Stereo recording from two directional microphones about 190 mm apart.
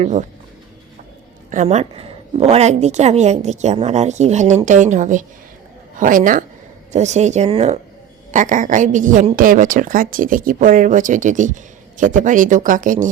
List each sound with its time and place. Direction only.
0.0 s a woman's voice: 40° right (ahead or behind)
1.5 s a woman's voice: 40° right (ahead or behind)